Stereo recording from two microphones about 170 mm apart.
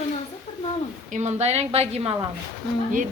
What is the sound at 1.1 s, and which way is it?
A woman's voice, 40° right (ahead or behind).